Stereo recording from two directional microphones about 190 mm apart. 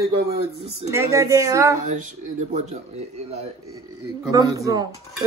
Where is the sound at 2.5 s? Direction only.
40° right (ahead or behind).